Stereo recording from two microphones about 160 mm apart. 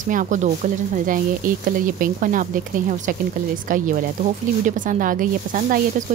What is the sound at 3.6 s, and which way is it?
Speech, 55° right (ahead or behind).